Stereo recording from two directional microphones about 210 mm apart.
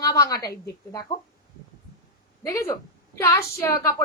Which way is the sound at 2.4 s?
10° left (ahead or behind).